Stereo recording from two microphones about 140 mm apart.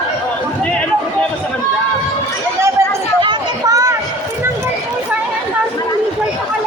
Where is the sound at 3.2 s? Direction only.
30° right (ahead or behind).